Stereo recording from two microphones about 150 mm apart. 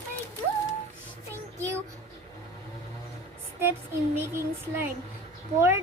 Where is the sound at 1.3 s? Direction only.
20° right (ahead or behind).